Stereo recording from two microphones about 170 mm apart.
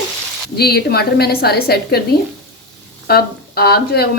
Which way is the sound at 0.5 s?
65° left (ahead or behind).